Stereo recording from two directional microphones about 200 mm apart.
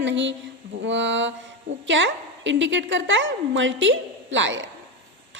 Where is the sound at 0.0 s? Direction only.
65° right (ahead or behind).